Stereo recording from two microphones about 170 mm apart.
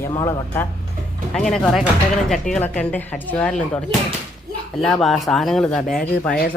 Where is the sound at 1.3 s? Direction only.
Centre (ahead or behind).